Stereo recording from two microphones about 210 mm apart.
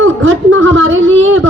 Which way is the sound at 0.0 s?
70° right (ahead or behind).